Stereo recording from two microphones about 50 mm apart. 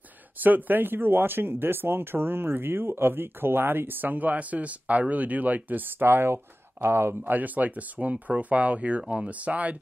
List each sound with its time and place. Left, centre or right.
0.4 s speech: right
7.2 s speech: right